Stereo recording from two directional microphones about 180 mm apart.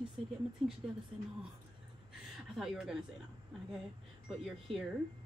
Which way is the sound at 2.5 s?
Centre (ahead or behind).